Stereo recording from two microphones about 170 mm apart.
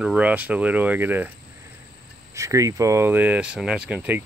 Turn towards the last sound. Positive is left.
turn(degrees=-10)  # may be behind; listen again after turning